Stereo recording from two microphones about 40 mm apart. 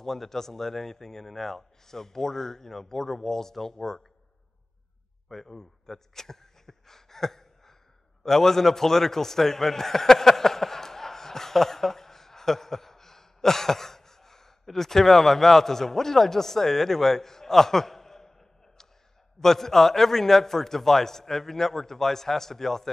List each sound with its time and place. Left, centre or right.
0.0 s a man's voice: centre
5.3 s a man's voice: centre
19.4 s a man's voice: centre